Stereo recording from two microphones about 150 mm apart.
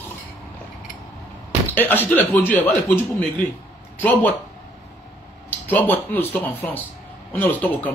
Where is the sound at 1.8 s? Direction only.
10° left (ahead or behind).